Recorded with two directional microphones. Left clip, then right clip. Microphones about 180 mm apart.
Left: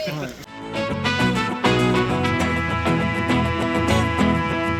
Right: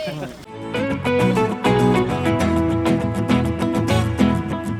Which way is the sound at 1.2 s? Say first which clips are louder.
Right 1 dB; centre (ahead or behind).